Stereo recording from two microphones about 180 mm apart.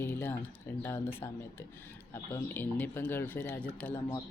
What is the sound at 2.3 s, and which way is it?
Speech, 10° left (ahead or behind).